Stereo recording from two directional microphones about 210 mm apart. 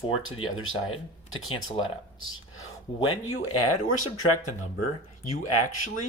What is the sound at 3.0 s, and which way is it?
Speech, 90° left.